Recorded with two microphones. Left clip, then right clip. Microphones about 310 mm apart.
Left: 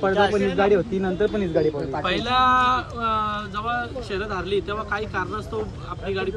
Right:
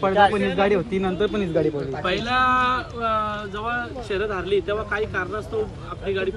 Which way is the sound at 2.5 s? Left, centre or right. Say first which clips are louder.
Left 1 dB; centre.